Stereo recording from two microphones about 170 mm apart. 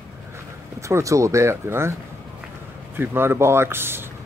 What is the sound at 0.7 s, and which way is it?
Speech, 15° right (ahead or behind).